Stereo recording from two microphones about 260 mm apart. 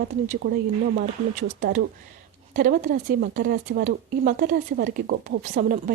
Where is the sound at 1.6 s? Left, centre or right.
Right.